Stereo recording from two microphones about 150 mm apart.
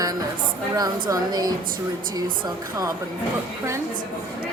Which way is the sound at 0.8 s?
25° right (ahead or behind).